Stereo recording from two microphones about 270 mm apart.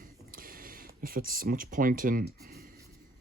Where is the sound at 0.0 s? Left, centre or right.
Right.